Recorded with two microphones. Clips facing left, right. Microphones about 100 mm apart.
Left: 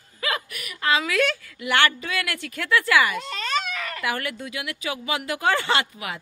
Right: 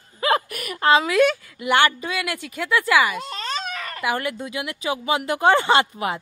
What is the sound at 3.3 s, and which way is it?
Baby cry, 35° right (ahead or behind).